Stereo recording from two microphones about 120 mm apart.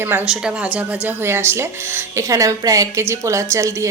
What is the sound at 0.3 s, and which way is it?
A woman's voice, 5° right (ahead or behind).